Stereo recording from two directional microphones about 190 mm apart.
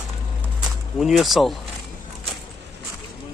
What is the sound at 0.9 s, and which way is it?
Speech, centre (ahead or behind).